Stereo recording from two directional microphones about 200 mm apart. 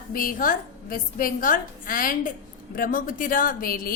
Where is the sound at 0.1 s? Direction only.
45° left (ahead or behind).